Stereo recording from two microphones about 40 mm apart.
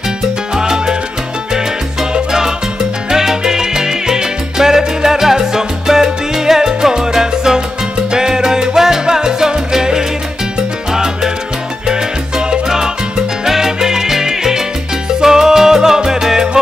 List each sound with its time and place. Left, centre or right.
0.2 s salsa music: centre
2.1 s salsa music: centre
11.9 s salsa music: centre